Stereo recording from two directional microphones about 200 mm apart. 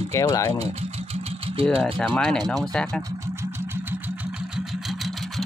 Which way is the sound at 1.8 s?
Centre (ahead or behind).